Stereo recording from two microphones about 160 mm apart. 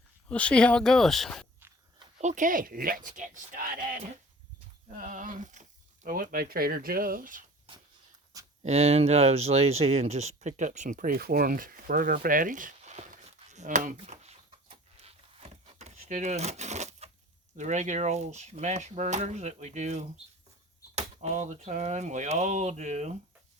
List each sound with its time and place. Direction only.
0.3 s speech: 5° left (ahead or behind)
2.1 s speech: 50° right (ahead or behind)
8.6 s speech: 45° right (ahead or behind)
14.9 s a sound: 40° right (ahead or behind)
17.6 s speech: 50° right (ahead or behind)